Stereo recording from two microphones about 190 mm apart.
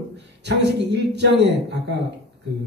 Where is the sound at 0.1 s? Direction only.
65° right (ahead or behind).